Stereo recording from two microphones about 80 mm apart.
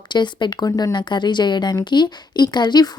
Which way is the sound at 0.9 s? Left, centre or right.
Left.